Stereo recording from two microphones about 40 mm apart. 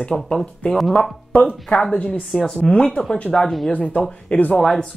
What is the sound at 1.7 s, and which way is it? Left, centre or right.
Speech, centre.